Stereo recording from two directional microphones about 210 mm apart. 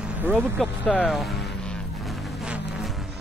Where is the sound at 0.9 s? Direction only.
5° left (ahead or behind).